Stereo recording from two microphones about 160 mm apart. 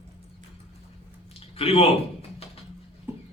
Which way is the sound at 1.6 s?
40° left (ahead or behind).